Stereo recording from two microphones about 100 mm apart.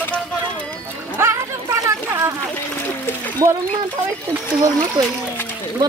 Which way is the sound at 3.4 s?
35° right (ahead or behind).